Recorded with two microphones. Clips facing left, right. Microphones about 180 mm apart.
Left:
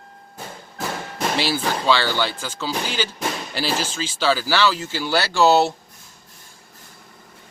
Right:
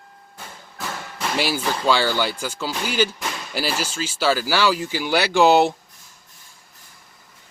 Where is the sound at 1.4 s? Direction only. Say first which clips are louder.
Right 2 dB; 10° right (ahead or behind).